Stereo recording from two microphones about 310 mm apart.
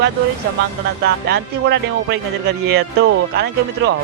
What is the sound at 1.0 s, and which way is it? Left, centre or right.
Speech, right.